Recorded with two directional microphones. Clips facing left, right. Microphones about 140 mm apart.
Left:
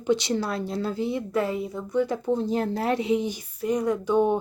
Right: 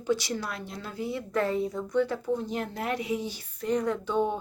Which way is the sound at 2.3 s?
30° left (ahead or behind).